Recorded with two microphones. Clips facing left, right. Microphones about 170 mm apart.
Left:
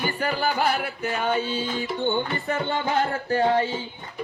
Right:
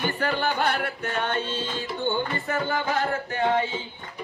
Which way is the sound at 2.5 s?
25° left (ahead or behind).